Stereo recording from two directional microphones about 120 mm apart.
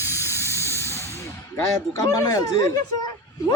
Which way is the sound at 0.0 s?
20° right (ahead or behind).